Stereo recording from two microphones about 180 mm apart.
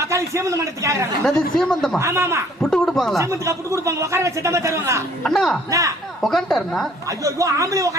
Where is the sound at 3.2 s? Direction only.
15° right (ahead or behind).